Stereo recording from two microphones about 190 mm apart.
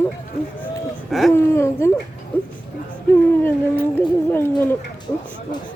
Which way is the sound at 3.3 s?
10° left (ahead or behind).